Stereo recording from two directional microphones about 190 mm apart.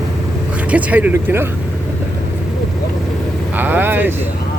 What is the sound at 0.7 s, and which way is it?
Speech, 10° right (ahead or behind).